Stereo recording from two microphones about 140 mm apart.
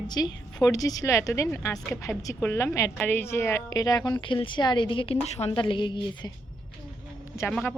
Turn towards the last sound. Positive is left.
turn(degrees=5)  # may be behind; listen again after turning